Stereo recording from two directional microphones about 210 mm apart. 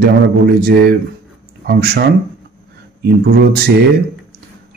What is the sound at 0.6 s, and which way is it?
Speech, 50° right (ahead or behind).